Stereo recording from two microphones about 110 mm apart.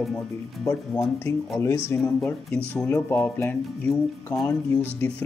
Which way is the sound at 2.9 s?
20° left (ahead or behind).